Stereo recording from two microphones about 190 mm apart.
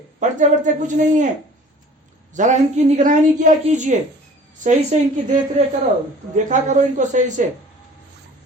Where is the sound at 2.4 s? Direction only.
40° right (ahead or behind).